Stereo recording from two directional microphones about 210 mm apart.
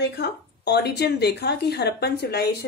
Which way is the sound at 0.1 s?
50° left (ahead or behind).